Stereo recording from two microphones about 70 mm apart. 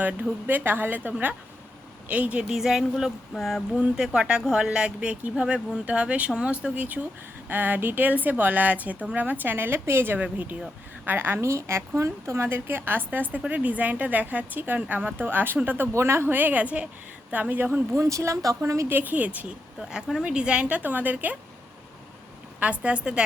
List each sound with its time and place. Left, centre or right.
0.0 s speech: right
2.5 s speech: centre
3.8 s a woman's voice: centre
15.9 s speech: right
17.9 s speech: right
18.9 s speech: right
19.8 s speech: centre; by 21.3 s right
22.6 s speech: centre